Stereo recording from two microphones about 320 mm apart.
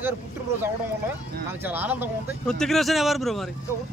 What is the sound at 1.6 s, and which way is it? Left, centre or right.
Speech, centre.